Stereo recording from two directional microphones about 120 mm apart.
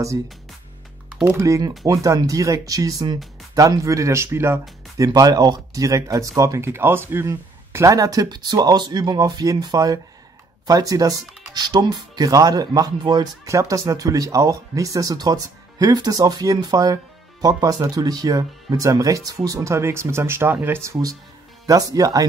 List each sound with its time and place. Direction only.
1.2 s speech: 25° right (ahead or behind)